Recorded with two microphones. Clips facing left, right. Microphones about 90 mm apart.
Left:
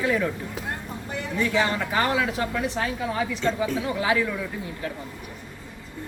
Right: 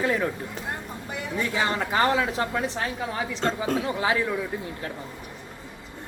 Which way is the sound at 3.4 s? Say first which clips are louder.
Even; 55° right (ahead or behind).